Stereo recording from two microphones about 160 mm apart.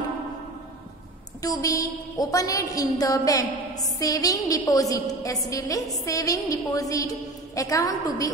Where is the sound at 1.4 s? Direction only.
20° left (ahead or behind).